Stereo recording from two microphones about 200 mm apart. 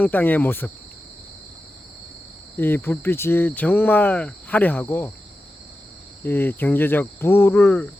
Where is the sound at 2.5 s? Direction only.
10° left (ahead or behind).